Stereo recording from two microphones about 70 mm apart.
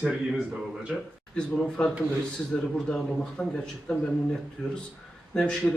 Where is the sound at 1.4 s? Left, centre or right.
Centre.